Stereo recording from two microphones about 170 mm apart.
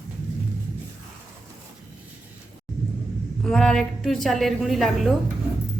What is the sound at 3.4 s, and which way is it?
A woman's voice, 5° left (ahead or behind).